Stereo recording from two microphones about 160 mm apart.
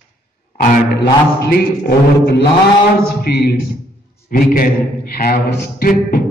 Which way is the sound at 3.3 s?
75° left (ahead or behind).